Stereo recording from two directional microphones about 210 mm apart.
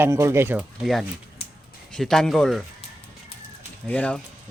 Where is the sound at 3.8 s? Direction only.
5° left (ahead or behind).